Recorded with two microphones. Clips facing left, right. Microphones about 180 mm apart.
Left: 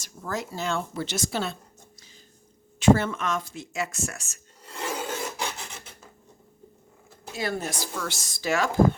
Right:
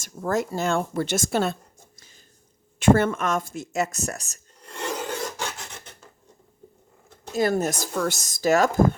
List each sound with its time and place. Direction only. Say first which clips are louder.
0.0 s speech: right 7 dB; 50° right (ahead or behind)
2.7 s speech: right 2 dB; 55° right (ahead or behind)
4.6 s filing: right 2 dB; 5° left (ahead or behind)
7.3 s speech: right 8 dB; 45° right (ahead or behind)